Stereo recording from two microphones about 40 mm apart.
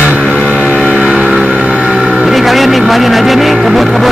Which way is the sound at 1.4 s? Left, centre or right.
Centre.